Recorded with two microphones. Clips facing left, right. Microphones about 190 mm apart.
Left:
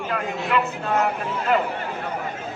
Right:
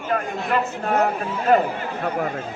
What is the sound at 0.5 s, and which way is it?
A man's voice, 40° right (ahead or behind).